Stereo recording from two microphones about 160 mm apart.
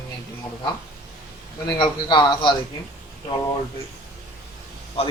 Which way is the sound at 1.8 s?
30° left (ahead or behind).